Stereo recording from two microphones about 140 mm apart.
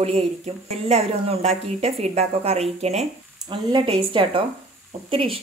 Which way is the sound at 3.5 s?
40° right (ahead or behind).